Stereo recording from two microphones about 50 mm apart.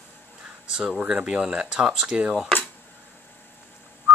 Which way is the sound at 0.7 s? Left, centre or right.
Centre.